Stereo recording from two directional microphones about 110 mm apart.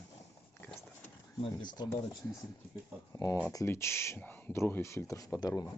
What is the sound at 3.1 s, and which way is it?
Speech, 30° left (ahead or behind).